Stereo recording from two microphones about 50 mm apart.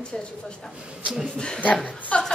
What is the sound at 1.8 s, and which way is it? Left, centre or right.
Speech, left.